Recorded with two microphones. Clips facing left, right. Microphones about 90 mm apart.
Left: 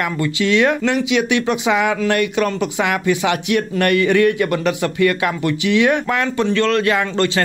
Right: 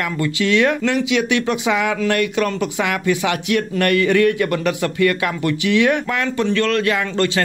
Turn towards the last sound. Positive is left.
turn(degrees=35)  # may be behind; listen again after turning